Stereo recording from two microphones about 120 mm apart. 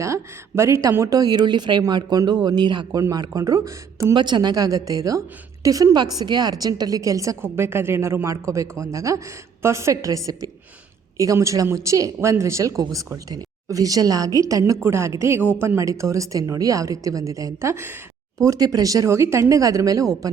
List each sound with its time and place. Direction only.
0.0 s speech: 25° right (ahead or behind)
4.1 s speech: 40° right (ahead or behind)